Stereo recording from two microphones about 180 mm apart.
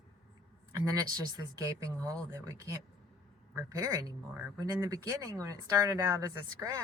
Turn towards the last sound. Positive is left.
turn(degrees=-20)  # may be behind; listen again after turning